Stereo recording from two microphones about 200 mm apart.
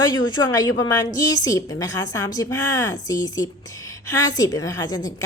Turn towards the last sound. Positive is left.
turn(degrees=20)  # may be behind; listen again after turning